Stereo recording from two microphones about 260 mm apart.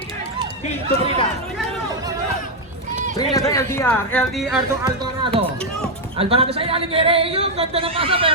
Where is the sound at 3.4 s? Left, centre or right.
Centre.